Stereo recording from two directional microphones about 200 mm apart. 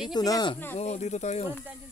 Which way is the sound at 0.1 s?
20° left (ahead or behind).